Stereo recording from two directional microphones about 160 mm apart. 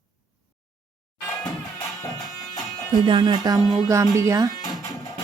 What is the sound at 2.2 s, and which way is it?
Music, centre (ahead or behind).